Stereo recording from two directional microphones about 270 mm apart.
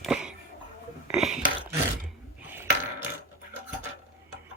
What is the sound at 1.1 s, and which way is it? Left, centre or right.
Whispering, centre.